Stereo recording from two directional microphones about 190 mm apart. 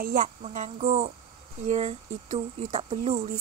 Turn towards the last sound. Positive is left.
turn(degrees=-35)  # may be behind; listen again after turning